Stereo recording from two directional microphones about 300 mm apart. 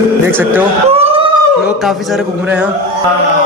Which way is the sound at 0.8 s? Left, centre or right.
Centre.